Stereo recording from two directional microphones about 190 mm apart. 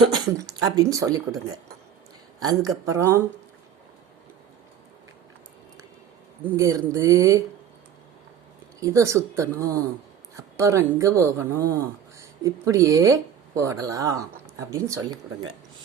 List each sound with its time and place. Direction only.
0.2 s speech: 20° right (ahead or behind)
2.5 s speech: 20° right (ahead or behind)
6.4 s speech: 15° right (ahead or behind)
8.8 s speech: 15° right (ahead or behind)